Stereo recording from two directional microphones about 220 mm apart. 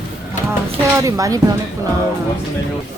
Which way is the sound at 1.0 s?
15° right (ahead or behind).